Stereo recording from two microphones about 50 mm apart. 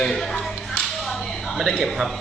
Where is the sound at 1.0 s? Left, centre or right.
Centre.